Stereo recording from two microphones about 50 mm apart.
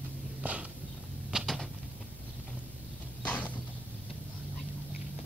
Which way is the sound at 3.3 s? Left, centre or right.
Left.